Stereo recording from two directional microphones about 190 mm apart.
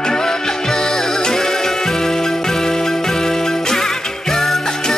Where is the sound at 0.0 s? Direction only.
5° left (ahead or behind).